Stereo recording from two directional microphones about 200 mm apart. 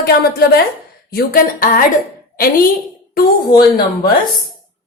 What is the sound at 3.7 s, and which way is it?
Speech, 50° left (ahead or behind).